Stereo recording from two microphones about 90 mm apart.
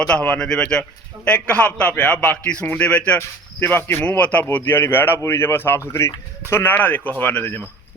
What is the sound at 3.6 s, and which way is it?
A man's voice, 25° left (ahead or behind).